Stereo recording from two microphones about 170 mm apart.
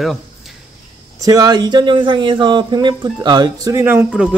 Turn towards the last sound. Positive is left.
turn(degrees=-10)  # may be behind; listen again after turning